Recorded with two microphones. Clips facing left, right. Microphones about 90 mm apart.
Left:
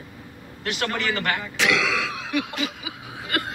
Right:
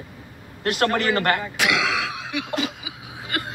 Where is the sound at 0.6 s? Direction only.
45° right (ahead or behind).